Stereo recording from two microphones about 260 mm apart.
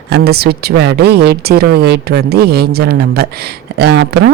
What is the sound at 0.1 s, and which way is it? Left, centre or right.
A man's voice, right.